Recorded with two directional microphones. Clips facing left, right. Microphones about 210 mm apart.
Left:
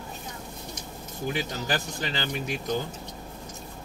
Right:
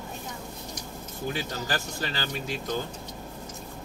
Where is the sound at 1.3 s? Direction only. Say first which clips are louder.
Left 2 dB; 15° left (ahead or behind).